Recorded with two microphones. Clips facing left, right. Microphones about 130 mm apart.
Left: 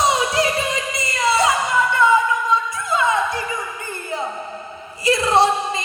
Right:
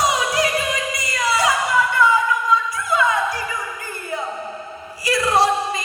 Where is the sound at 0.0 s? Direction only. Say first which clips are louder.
Left 1 dB; 25° left (ahead or behind).